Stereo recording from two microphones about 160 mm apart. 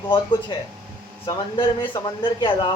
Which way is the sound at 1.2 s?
30° left (ahead or behind).